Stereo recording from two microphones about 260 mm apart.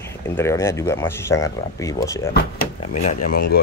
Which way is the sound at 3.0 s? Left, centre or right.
Left.